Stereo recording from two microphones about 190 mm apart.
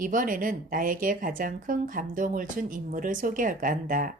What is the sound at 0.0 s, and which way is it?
A woman's voice, 45° right (ahead or behind).